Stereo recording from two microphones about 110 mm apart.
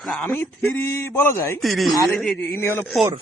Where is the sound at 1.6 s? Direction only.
Centre (ahead or behind).